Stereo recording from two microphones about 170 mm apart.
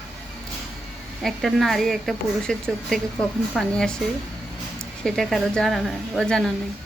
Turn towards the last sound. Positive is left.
turn(degrees=5)  # may be behind; listen again after turning